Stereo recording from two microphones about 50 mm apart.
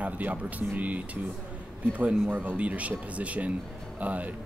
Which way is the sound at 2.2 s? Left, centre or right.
Right.